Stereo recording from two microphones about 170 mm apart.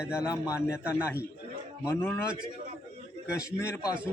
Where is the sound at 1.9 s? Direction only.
10° left (ahead or behind).